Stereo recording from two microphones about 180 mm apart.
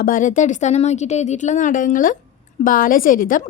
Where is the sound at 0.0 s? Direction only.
45° left (ahead or behind).